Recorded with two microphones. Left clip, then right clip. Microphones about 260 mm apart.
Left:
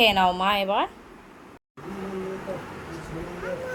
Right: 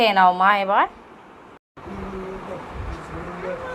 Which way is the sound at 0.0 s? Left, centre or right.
Centre.